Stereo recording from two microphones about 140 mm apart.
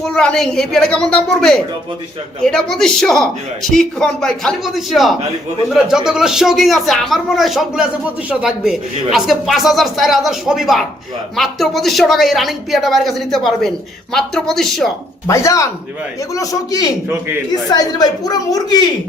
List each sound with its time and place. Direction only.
0.0 s a man's voice: 5° left (ahead or behind)
15.3 s a woman's voice: 20° left (ahead or behind)